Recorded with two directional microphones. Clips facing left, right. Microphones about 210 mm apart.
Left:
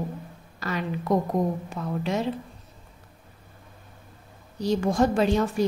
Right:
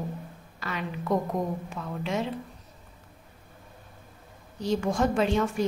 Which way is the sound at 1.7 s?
40° left (ahead or behind).